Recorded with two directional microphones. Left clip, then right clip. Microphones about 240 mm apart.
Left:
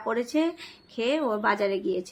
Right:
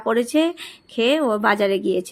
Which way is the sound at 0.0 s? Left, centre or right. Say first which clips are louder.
Right 7 dB; right.